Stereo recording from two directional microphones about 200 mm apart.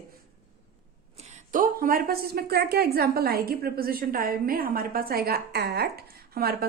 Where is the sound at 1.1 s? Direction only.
35° right (ahead or behind).